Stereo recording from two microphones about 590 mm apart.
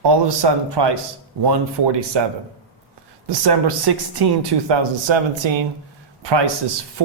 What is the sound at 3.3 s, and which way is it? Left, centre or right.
A woman's voice, right.